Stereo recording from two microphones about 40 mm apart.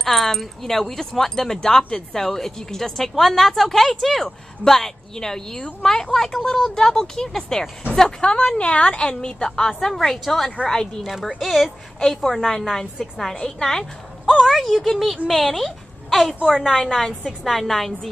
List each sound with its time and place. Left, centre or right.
0.0 s a woman's voice: centre
14.2 s speech: centre
14.5 s a woman's voice: centre